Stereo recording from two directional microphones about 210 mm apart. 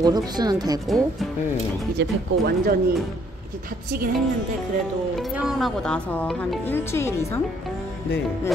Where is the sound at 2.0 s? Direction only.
45° right (ahead or behind).